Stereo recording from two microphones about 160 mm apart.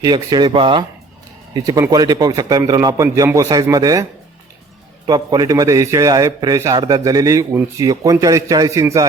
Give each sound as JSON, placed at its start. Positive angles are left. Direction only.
{"t": 0.0, "sound": "a man's voice", "side_deg": -25}
{"t": 5.0, "sound": "a man's voice", "side_deg": -25}